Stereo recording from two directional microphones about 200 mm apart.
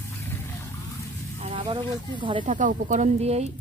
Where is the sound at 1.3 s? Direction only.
30° right (ahead or behind).